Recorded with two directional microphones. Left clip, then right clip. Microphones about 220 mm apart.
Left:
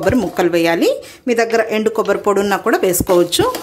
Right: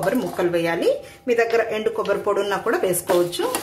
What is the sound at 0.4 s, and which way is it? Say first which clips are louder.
Speech: left 8 dB; 40° left (ahead or behind).